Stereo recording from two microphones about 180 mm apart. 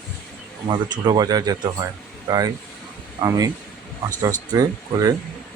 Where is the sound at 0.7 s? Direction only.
25° right (ahead or behind).